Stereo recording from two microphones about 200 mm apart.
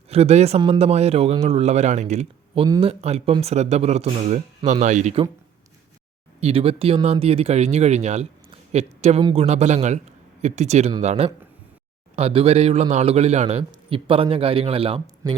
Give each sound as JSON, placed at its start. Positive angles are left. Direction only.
{"t": 0.1, "sound": "speech", "side_deg": -30}
{"t": 2.6, "sound": "a man's voice", "side_deg": -20}
{"t": 2.9, "sound": "speech", "side_deg": -30}
{"t": 6.4, "sound": "a man's voice", "side_deg": -30}